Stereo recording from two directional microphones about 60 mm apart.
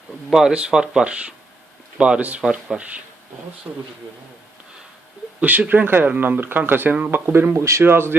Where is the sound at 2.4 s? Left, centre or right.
Centre.